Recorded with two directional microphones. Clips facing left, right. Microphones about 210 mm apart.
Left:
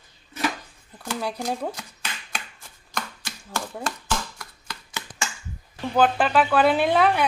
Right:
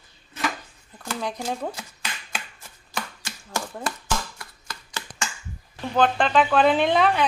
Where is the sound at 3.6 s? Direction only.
5° left (ahead or behind).